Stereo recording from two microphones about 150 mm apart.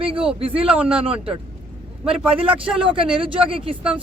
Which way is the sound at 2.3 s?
35° right (ahead or behind).